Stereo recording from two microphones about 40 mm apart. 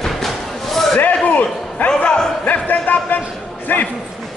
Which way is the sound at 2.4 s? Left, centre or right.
Left.